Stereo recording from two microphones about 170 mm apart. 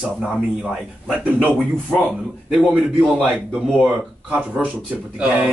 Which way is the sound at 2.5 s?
5° right (ahead or behind).